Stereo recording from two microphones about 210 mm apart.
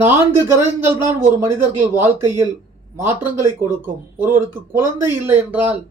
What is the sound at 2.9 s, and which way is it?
Speech, 10° right (ahead or behind).